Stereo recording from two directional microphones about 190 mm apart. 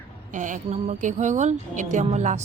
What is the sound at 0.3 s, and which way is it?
Speech, 40° right (ahead or behind).